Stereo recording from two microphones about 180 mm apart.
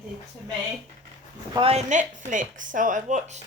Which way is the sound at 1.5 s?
35° right (ahead or behind).